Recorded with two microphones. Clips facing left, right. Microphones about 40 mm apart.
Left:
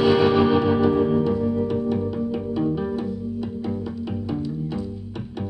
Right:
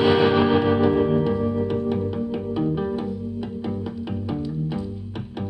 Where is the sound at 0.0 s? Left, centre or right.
Centre.